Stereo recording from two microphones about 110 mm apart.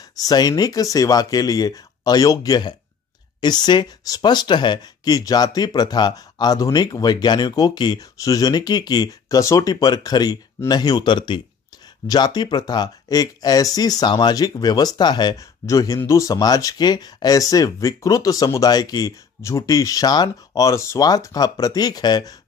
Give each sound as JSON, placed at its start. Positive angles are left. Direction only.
{"t": 0.1, "sound": "speech", "side_deg": 35}